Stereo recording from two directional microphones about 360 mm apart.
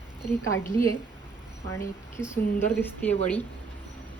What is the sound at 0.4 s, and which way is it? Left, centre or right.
Speech, left.